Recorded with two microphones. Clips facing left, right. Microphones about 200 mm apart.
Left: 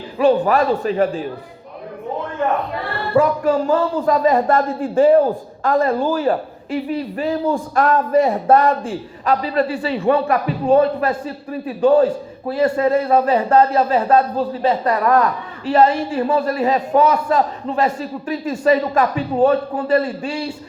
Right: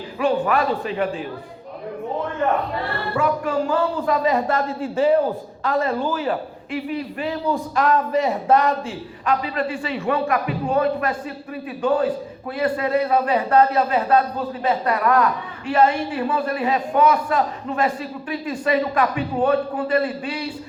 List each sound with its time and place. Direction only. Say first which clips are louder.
0.2 s a man's voice: left 5 dB; 35° left (ahead or behind)
3.2 s a man's voice: left 6 dB; 40° left (ahead or behind)
9.2 s a man's voice: left 4 dB; 35° left (ahead or behind)